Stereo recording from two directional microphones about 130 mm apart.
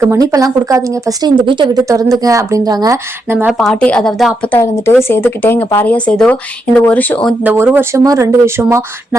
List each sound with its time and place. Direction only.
0.0 s speech: 25° right (ahead or behind)
1.5 s a woman's voice: 35° right (ahead or behind)
1.8 s speech: 25° right (ahead or behind)
3.2 s speech: 15° right (ahead or behind)
3.6 s a woman's voice: 10° left (ahead or behind)
4.5 s speech: 20° left (ahead or behind)
7.4 s speech: 15° right (ahead or behind)